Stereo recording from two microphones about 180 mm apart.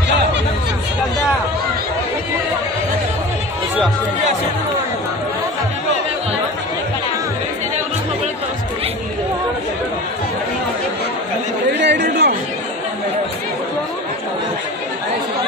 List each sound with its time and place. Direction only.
11.8 s chatter: 70° right (ahead or behind)